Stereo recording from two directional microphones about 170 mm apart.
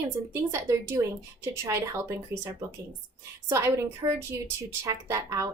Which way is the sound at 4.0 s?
20° right (ahead or behind).